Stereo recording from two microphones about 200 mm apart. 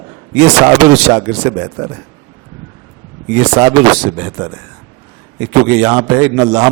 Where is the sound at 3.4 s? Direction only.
25° right (ahead or behind).